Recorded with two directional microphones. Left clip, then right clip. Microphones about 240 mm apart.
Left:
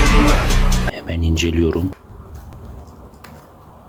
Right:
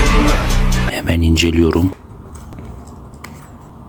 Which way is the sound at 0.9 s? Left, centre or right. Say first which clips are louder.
Right 7 dB; right.